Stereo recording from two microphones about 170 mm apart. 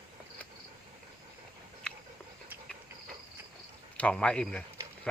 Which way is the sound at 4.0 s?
5° left (ahead or behind).